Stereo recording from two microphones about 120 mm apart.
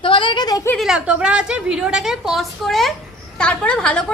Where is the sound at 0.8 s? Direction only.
5° right (ahead or behind).